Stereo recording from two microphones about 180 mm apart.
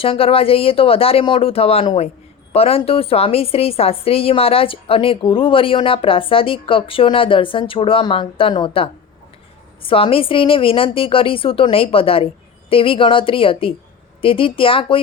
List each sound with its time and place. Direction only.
0.0 s a woman's voice: 30° left (ahead or behind)